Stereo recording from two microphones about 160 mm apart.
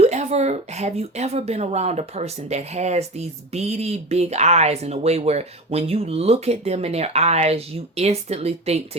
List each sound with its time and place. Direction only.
0.0 s a woman's voice: 45° right (ahead or behind)